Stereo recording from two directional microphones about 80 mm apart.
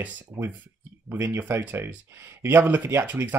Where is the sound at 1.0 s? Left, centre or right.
Right.